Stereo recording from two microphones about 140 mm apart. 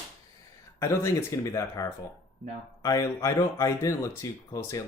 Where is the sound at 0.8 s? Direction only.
20° left (ahead or behind).